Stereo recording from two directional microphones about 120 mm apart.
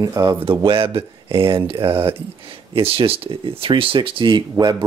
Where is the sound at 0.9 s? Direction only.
50° right (ahead or behind).